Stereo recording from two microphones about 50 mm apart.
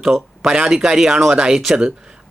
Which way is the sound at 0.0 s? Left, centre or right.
Centre.